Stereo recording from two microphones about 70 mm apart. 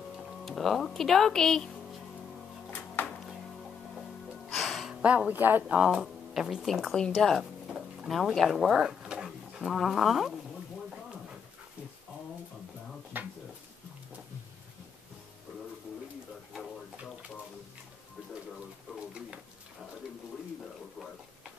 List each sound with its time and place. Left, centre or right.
0.5 s speech: centre
3.0 s music: left
4.5 s music: centre
5.0 s speech: centre
5.8 s speech: centre
7.7 s drawer open or close: centre
9.7 s speech: centre
13.1 s a sound: right